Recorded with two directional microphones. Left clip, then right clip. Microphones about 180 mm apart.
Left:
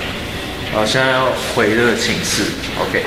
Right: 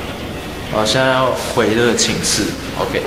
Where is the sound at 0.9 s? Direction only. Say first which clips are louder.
Right 1 dB; centre (ahead or behind).